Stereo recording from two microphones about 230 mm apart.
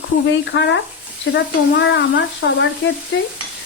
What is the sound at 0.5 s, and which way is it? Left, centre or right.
Speech, left.